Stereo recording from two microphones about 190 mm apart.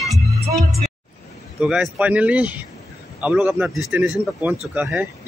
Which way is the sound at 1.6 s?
5° right (ahead or behind).